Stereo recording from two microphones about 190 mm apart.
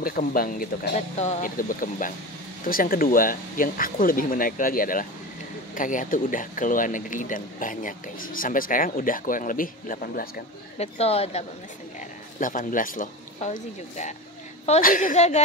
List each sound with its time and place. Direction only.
0.0 s speech: 50° left (ahead or behind)
1.1 s speech: 35° left (ahead or behind)
10.8 s speech: 30° left (ahead or behind)
12.0 s speech: 45° left (ahead or behind)